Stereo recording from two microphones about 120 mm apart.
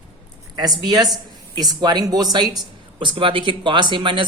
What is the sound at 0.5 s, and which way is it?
Speech, 35° right (ahead or behind).